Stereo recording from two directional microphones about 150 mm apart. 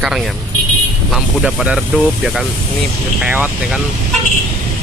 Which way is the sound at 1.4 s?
5° right (ahead or behind).